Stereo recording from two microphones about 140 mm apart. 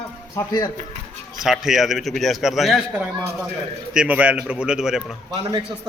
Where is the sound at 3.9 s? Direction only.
5° right (ahead or behind).